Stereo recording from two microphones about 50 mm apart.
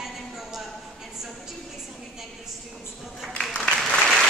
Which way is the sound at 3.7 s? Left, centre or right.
Left.